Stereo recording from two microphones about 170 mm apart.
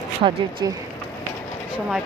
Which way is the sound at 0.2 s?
30° right (ahead or behind).